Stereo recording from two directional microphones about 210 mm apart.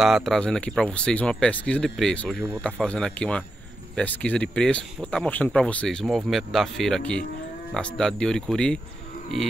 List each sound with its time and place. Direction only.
0.0 s speech: centre (ahead or behind)